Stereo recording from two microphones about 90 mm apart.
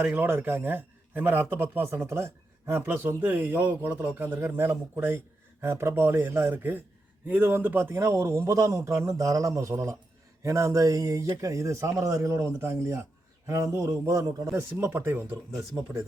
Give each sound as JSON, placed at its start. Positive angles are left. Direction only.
{"t": 0.0, "sound": "a man's voice", "side_deg": -20}